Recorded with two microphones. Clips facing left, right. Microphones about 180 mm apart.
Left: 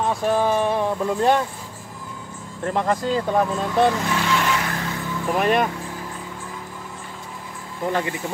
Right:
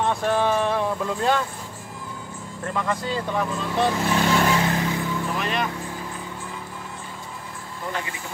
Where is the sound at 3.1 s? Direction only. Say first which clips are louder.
Left 5 dB; 45° left (ahead or behind).